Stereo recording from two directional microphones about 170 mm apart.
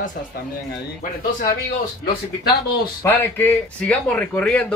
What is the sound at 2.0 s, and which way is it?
Speech, 65° left (ahead or behind).